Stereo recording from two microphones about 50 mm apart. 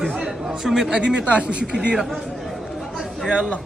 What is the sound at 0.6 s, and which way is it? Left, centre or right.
Speech, centre.